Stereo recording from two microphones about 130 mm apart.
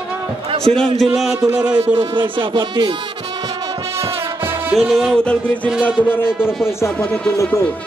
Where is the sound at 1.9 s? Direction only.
10° right (ahead or behind).